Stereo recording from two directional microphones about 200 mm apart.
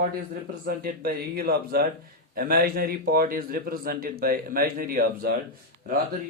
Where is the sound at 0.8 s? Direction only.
50° right (ahead or behind).